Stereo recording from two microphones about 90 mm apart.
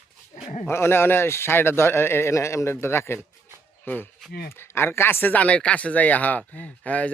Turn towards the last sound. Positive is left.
turn(degrees=15)  # may be behind; listen again after turning